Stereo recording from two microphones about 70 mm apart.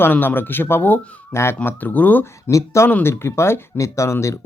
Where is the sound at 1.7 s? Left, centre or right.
Left.